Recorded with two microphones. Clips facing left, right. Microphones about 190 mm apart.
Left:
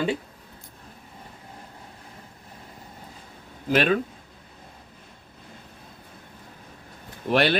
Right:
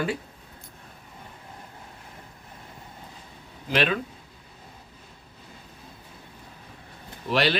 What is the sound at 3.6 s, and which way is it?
Speech, 45° left (ahead or behind).